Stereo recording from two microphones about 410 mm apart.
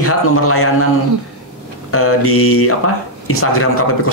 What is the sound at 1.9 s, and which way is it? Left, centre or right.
A man's voice, left.